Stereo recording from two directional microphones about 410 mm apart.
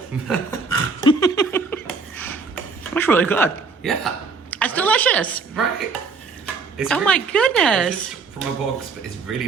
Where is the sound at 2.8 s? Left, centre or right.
Centre.